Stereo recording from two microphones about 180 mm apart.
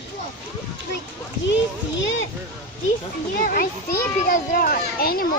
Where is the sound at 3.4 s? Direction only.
50° left (ahead or behind).